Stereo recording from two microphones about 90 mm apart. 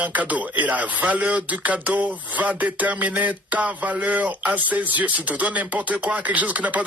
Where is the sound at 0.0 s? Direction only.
15° right (ahead or behind).